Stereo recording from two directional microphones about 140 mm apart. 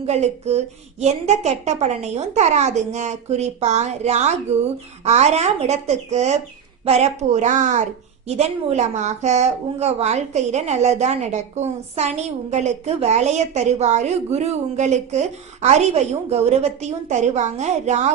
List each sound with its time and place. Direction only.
0.0 s a woman's voice: 50° right (ahead or behind)
8.3 s a woman's voice: 50° right (ahead or behind)